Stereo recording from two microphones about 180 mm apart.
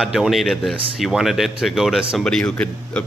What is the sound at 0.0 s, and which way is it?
A man's voice, centre (ahead or behind).